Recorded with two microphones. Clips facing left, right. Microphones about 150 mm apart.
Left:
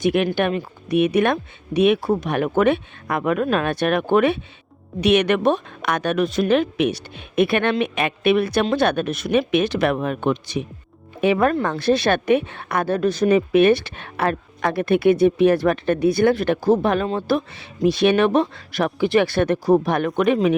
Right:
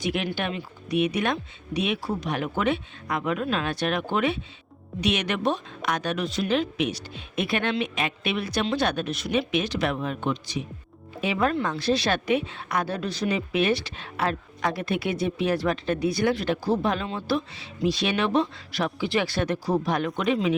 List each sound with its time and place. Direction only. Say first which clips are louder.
0.0 s a woman's voice: left 9 dB; 55° left (ahead or behind)